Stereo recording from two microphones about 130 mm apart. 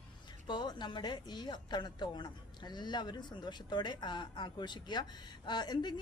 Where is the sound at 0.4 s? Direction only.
35° left (ahead or behind).